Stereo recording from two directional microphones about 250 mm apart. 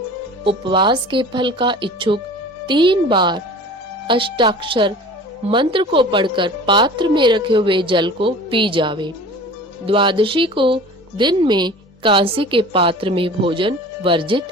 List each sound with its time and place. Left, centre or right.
0.4 s speech: centre